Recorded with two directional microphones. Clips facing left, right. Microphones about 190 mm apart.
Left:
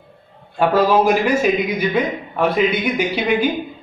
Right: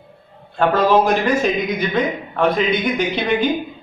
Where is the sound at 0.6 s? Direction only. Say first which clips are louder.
Even; 10° left (ahead or behind).